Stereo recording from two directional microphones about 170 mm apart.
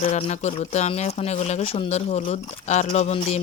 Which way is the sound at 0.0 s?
40° left (ahead or behind).